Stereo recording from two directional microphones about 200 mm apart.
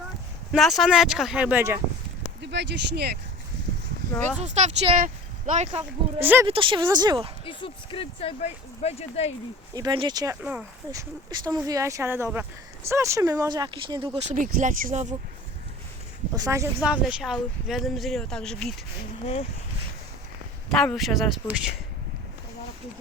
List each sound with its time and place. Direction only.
0.5 s speech: centre (ahead or behind)
2.4 s speech: 60° right (ahead or behind)
4.4 s speech: 35° right (ahead or behind)
6.1 s speech: 10° right (ahead or behind)
6.5 s speech: 25° right (ahead or behind)
7.4 s speech: 25° left (ahead or behind)
9.7 s speech: 20° right (ahead or behind)
10.4 s speech: 10° right (ahead or behind)
11.3 s speech: 20° right (ahead or behind); by 15.1 s 40° right (ahead or behind)
16.3 s speech: 15° right (ahead or behind); by 18.7 s 5° left (ahead or behind)
19.2 s speech: 30° left (ahead or behind)
20.7 s speech: centre (ahead or behind)